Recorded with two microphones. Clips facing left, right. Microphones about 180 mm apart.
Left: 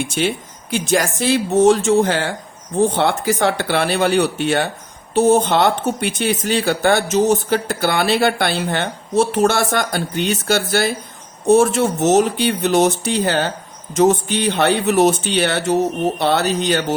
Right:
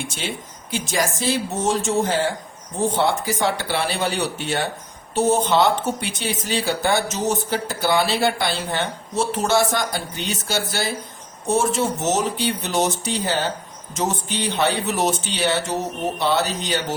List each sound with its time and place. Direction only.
0.2 s speech: 60° left (ahead or behind)